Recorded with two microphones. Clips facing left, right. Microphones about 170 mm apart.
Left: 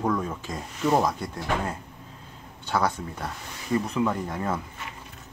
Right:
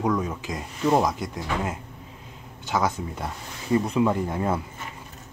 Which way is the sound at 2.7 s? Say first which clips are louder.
Right 1 dB; 10° right (ahead or behind).